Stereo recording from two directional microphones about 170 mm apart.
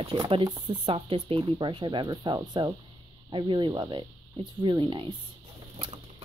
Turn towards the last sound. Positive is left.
turn(degrees=-30)  # may be behind; listen again after turning